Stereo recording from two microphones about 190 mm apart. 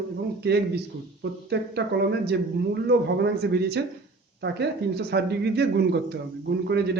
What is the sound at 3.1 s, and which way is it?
Speech, 60° right (ahead or behind).